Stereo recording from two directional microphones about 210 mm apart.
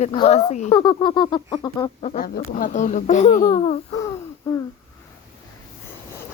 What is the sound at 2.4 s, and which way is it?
Speech, 40° left (ahead or behind).